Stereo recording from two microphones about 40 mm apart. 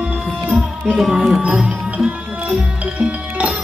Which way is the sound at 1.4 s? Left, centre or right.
Right.